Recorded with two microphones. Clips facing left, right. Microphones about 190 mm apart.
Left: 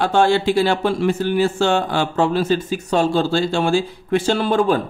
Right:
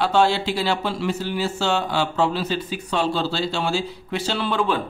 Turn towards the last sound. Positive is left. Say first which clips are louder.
# left 5 dB
turn(degrees=40)  # may be behind; listen again after turning